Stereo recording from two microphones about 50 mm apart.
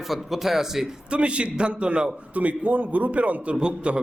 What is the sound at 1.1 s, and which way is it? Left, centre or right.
A man's voice, right.